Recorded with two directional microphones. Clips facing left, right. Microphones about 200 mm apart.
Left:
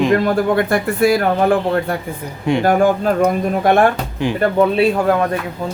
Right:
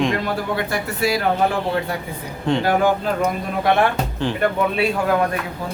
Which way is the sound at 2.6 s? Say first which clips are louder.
Left 6 dB; 50° left (ahead or behind).